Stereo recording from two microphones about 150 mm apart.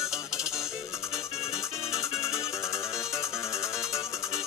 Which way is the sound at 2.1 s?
5° right (ahead or behind).